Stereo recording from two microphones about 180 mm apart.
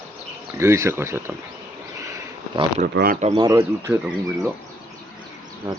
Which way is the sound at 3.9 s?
Centre (ahead or behind).